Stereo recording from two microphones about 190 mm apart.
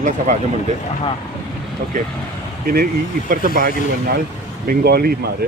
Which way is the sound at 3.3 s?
45° right (ahead or behind).